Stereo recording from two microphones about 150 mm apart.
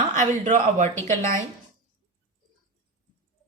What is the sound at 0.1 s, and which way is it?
Speech, 55° right (ahead or behind).